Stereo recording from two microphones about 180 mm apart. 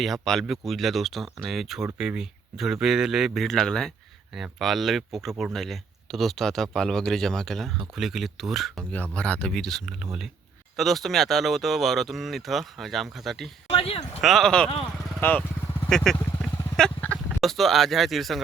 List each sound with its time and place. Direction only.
0.0 s speech: centre (ahead or behind)
13.7 s a sound: 35° left (ahead or behind)
14.2 s speech: centre (ahead or behind)
15.2 s vehicle: 10° left (ahead or behind)
16.1 s vehicle: 15° left (ahead or behind)
16.7 s a sound: 5° left (ahead or behind)
17.4 s speech: centre (ahead or behind)